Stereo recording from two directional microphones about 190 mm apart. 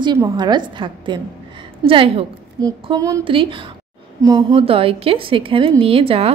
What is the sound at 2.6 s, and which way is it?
A woman's voice, 20° right (ahead or behind).